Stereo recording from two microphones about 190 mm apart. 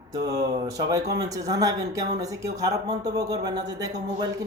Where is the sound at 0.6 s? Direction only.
20° right (ahead or behind).